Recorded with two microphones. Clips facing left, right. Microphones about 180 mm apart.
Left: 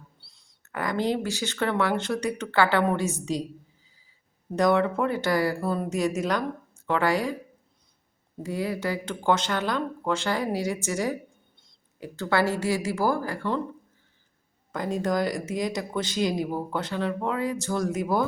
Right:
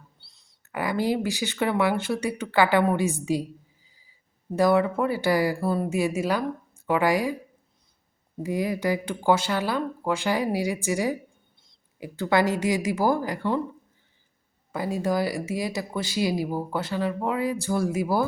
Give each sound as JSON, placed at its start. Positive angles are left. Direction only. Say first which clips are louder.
{"t": 0.2, "sound": "a sound", "louder": "left 1 dB", "side_deg": 0}
{"t": 0.6, "sound": "speech", "louder": "right 1 dB", "side_deg": -10}
{"t": 4.5, "sound": "speech", "louder": "right 1 dB", "side_deg": -5}
{"t": 8.4, "sound": "speech", "louder": "right 3 dB", "side_deg": -15}
{"t": 14.7, "sound": "speech", "louder": "right 1 dB", "side_deg": -5}